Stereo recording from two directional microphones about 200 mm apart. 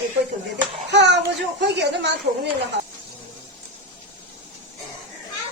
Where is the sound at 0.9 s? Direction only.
60° right (ahead or behind).